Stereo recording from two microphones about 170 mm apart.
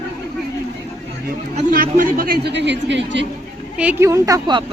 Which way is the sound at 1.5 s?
55° right (ahead or behind).